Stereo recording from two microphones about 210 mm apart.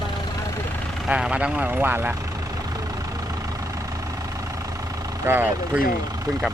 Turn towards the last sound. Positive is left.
turn(degrees=-10)  # may be behind; listen again after turning